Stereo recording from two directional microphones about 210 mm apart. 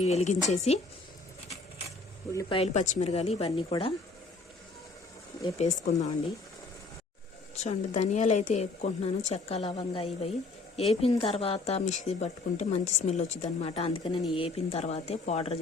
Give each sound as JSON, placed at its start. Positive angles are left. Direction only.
{"t": 0.0, "sound": "a woman's voice", "side_deg": 30}
{"t": 2.3, "sound": "speech", "side_deg": 15}
{"t": 2.6, "sound": "speech", "side_deg": 35}
{"t": 5.4, "sound": "a woman's voice", "side_deg": 30}
{"t": 7.5, "sound": "a woman's voice", "side_deg": 30}